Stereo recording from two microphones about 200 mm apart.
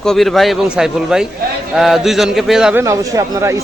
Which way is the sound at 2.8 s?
15° right (ahead or behind).